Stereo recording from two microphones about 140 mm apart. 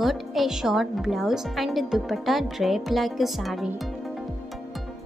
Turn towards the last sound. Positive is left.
turn(degrees=0)  # may be behind; listen again after turning